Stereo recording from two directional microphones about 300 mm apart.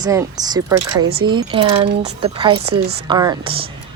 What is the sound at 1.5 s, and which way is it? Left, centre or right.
Speech, centre.